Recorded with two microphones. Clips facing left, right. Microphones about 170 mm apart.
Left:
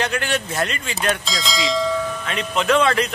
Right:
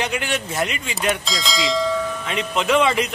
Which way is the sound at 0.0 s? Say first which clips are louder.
Left 1 dB; 15° right (ahead or behind).